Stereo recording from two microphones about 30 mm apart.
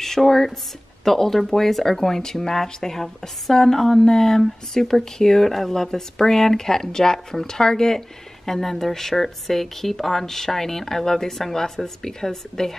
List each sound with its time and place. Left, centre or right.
0.0 s speech: centre
3.5 s a sound: centre
4.0 s speech: left